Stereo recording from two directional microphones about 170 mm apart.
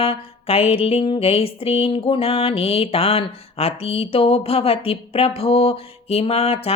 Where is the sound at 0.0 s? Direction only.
35° left (ahead or behind).